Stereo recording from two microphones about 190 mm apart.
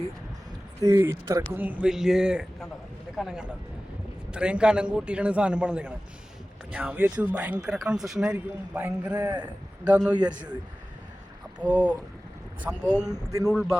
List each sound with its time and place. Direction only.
0.9 s a man's voice: 15° right (ahead or behind)
9.1 s a man's voice: 20° right (ahead or behind)
11.6 s speech: 5° right (ahead or behind)
13.1 s a man's voice: 20° right (ahead or behind)
13.5 s a man's voice: centre (ahead or behind)